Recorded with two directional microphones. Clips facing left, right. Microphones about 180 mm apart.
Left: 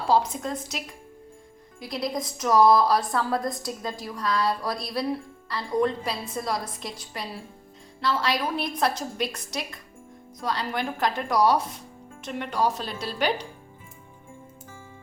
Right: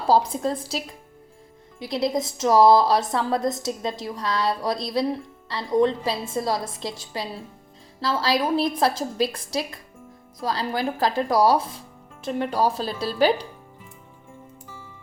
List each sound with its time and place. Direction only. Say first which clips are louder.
0.1 s a woman's voice: right 3 dB; 30° right (ahead or behind)
1.8 s a woman's voice: right 5 dB; 25° right (ahead or behind)